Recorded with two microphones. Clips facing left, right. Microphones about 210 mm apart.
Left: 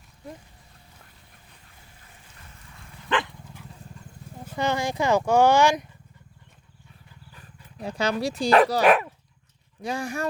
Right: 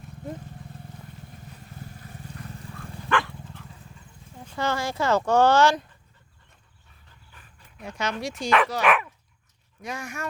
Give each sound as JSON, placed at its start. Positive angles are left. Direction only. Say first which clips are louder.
{"t": 1.8, "sound": "vehicle", "louder": "right 15 dB", "side_deg": -40}
{"t": 3.1, "sound": "dog", "louder": "even", "side_deg": 20}
{"t": 4.5, "sound": "speech", "louder": "left 2 dB", "side_deg": 15}
{"t": 7.8, "sound": "speech", "louder": "left 4 dB", "side_deg": 35}